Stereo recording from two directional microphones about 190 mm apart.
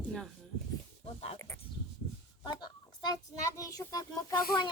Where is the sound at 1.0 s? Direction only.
30° left (ahead or behind).